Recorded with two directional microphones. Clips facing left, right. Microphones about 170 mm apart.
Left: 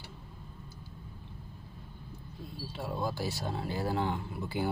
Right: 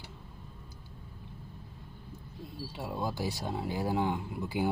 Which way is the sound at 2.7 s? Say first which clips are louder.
Left 1 dB; 15° right (ahead or behind).